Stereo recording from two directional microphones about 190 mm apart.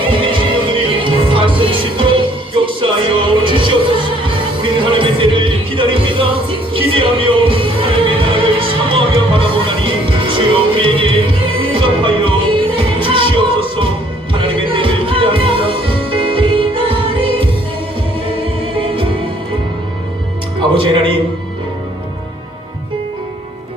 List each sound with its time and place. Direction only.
0.1 s music: 25° right (ahead or behind)
18.8 s music: 25° right (ahead or behind)
20.6 s music: 25° right (ahead or behind)